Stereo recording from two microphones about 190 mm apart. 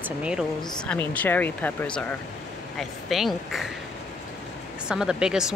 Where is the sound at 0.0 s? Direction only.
5° right (ahead or behind).